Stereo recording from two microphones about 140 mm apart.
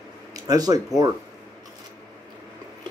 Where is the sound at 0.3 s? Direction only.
25° right (ahead or behind).